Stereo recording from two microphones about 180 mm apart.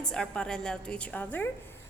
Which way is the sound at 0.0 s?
5° left (ahead or behind).